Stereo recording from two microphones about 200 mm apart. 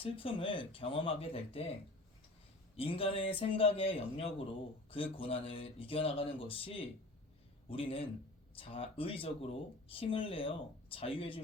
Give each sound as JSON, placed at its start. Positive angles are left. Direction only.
{"t": 0.0, "sound": "speech", "side_deg": 25}
{"t": 2.7, "sound": "speech", "side_deg": 30}